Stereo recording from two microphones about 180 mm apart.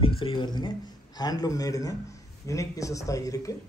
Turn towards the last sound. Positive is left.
turn(degrees=20)  # may be behind; listen again after turning